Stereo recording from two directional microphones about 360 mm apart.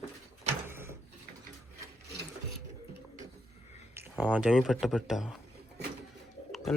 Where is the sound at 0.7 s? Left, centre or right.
Centre.